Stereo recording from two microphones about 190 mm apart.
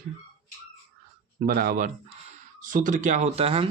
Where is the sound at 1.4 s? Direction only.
50° right (ahead or behind).